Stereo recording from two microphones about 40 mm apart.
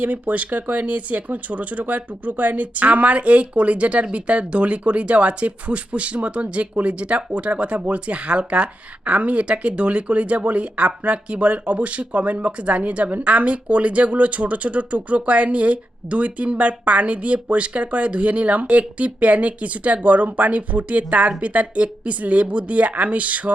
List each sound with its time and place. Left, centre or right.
0.0 s speech: right